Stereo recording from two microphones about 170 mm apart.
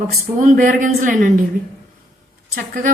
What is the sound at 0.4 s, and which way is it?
Speech, 50° right (ahead or behind).